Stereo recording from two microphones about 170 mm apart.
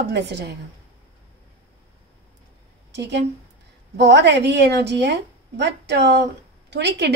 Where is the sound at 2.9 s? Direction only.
90° right.